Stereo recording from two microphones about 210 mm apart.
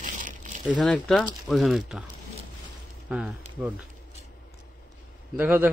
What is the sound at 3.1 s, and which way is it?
Speech, 5° right (ahead or behind).